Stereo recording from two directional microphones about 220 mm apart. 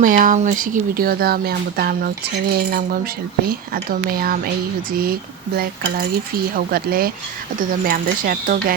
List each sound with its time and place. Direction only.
0.0 s speech: 40° right (ahead or behind)
6.7 s speech: 45° right (ahead or behind)